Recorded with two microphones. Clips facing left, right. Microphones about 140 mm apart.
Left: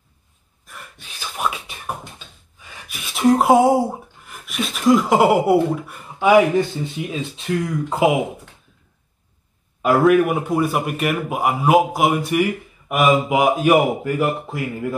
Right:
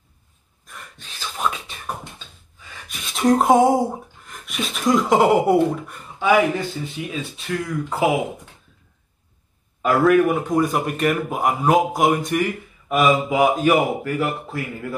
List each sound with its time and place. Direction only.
0.7 s a sound: 5° left (ahead or behind)
2.9 s speech: 5° left (ahead or behind)
6.1 s speech: 15° left (ahead or behind)
9.8 s a man's voice: 10° left (ahead or behind)